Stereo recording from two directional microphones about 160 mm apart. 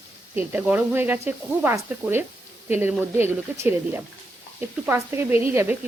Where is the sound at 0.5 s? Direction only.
10° right (ahead or behind).